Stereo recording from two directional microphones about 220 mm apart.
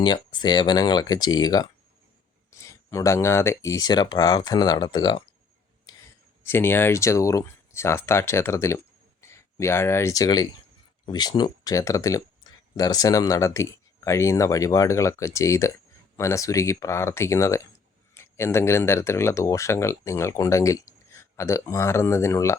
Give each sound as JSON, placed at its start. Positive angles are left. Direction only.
{"t": 0.0, "sound": "speech", "side_deg": 20}
{"t": 6.4, "sound": "speech", "side_deg": 10}